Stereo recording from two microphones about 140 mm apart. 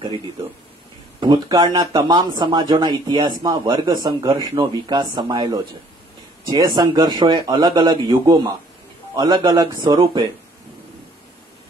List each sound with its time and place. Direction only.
1.2 s speech: 30° right (ahead or behind)